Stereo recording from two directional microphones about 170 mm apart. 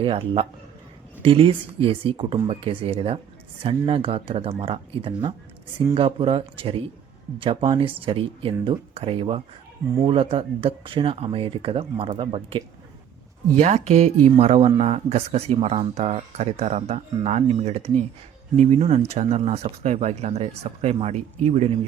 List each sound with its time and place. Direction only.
0.0 s speech: 35° right (ahead or behind)
13.6 s speech: 40° right (ahead or behind)